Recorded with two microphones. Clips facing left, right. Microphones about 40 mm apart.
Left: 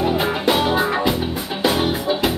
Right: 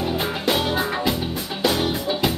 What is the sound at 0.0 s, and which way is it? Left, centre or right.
Music, centre.